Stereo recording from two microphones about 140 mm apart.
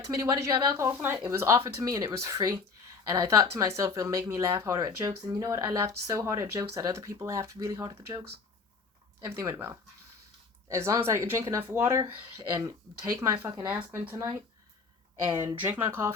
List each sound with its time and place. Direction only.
0.0 s speech: 25° right (ahead or behind)
0.9 s speech: 10° right (ahead or behind)
9.3 s speech: 20° right (ahead or behind)
13.7 s speech: 10° right (ahead or behind)